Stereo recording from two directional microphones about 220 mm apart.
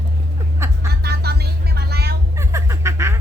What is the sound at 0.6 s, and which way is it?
Vehicle, 10° right (ahead or behind).